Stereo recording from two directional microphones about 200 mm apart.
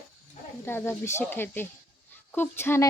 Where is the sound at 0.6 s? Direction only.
10° left (ahead or behind).